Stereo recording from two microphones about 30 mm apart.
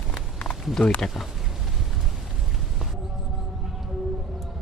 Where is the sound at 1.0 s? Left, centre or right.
Left.